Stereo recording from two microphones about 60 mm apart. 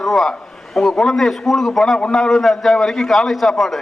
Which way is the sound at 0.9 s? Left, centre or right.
Centre.